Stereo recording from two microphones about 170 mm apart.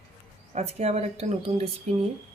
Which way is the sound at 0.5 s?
40° right (ahead or behind).